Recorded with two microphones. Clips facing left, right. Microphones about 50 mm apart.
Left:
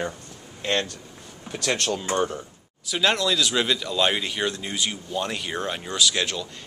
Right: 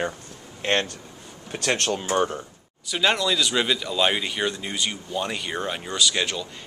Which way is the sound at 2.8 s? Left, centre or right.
Centre.